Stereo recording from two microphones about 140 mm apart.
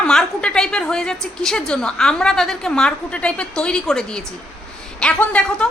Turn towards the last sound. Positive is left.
turn(degrees=10)  # may be behind; listen again after turning